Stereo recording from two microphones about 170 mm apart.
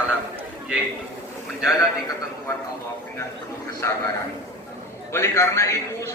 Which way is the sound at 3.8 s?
15° left (ahead or behind).